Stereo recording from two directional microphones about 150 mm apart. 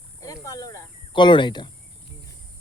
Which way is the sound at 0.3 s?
25° left (ahead or behind).